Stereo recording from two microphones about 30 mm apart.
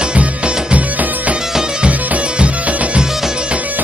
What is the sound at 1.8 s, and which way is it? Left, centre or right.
Music, right.